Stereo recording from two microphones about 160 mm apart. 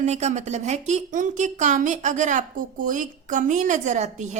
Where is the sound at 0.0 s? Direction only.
45° right (ahead or behind).